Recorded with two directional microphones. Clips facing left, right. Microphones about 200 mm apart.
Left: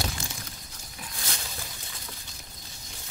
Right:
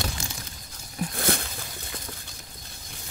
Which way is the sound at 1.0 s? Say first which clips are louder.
Right 13 dB; 55° right (ahead or behind).